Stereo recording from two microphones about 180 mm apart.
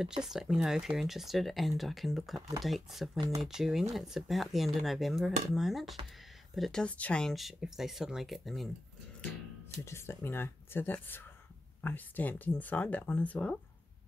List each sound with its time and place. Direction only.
0.0 s speech: 5° right (ahead or behind)
3.2 s speech: 20° right (ahead or behind)
3.4 s speech: 5° right (ahead or behind)
9.8 s speech: 15° left (ahead or behind)